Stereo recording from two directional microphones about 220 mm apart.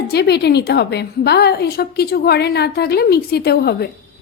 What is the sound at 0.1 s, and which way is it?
Speech, 50° left (ahead or behind).